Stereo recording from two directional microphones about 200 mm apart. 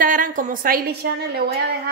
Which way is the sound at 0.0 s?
45° right (ahead or behind).